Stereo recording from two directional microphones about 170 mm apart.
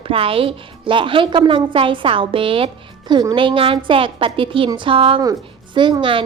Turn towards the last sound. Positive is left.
turn(degrees=-30)  # may be behind; listen again after turning